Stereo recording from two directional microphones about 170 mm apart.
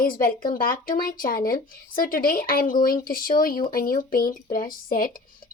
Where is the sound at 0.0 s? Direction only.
60° left (ahead or behind).